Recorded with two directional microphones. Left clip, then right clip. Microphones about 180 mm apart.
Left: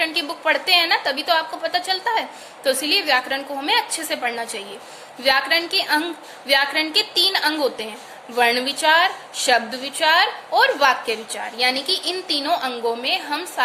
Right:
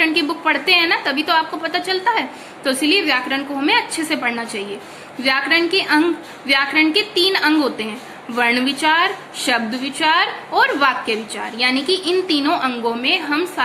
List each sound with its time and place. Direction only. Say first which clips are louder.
0.0 s a woman's voice: right 4 dB; 50° left (ahead or behind)